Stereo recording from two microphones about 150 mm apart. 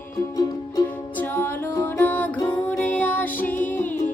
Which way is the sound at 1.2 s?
15° left (ahead or behind).